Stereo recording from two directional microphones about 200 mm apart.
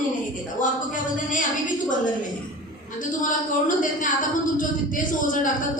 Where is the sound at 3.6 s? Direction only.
40° left (ahead or behind).